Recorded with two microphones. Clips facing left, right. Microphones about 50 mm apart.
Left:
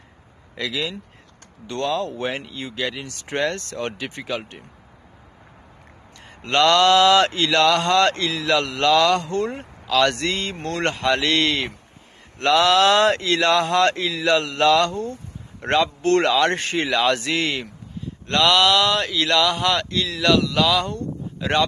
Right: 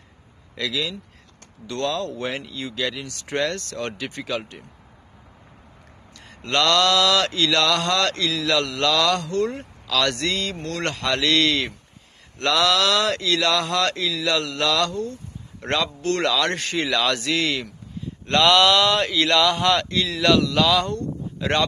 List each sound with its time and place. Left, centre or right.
0.6 s speech: left
1.8 s speech: centre
3.1 s speech: left
3.3 s speech: centre
6.2 s speech: centre
11.0 s speech: centre
16.0 s speech: left
16.3 s speech: left
18.0 s speech: centre